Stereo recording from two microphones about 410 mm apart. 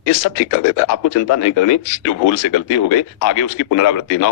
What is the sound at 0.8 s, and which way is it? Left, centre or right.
A man's voice, left.